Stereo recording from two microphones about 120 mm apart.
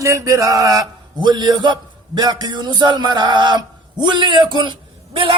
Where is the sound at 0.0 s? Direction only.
25° right (ahead or behind).